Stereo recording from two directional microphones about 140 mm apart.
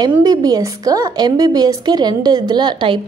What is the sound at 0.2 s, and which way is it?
A woman's voice, 25° right (ahead or behind).